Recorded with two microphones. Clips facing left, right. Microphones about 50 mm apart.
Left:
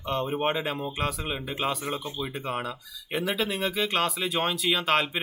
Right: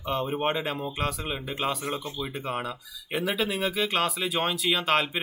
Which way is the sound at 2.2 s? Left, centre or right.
Centre.